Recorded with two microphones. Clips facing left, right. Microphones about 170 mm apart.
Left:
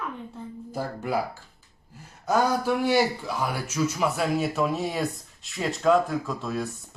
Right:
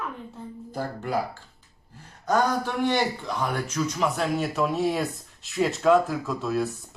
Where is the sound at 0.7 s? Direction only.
10° left (ahead or behind).